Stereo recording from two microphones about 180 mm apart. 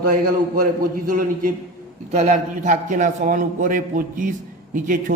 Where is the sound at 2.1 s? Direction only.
40° right (ahead or behind).